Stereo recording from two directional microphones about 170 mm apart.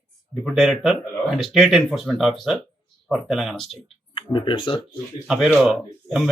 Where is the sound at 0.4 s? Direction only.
Centre (ahead or behind).